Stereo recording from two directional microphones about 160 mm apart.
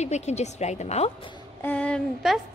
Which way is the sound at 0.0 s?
45° left (ahead or behind).